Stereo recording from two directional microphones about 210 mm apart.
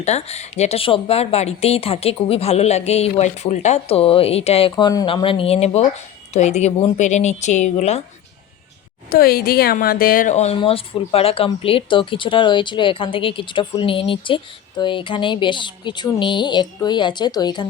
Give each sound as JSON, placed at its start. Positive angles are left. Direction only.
{"t": 0.0, "sound": "speech", "side_deg": 30}
{"t": 9.0, "sound": "speech", "side_deg": 45}